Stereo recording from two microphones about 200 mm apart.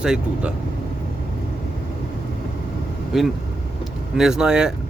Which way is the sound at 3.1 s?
Centre (ahead or behind).